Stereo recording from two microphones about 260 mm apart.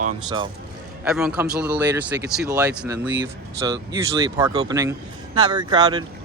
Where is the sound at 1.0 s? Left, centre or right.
Centre.